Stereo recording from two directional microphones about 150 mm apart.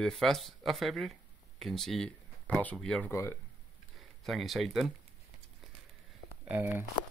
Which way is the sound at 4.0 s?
Centre (ahead or behind).